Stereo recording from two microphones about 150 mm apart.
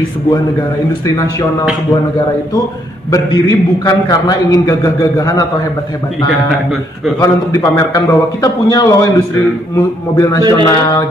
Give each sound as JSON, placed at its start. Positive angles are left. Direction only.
{"t": 3.1, "sound": "a man's voice", "side_deg": 25}
{"t": 7.2, "sound": "a man's voice", "side_deg": 20}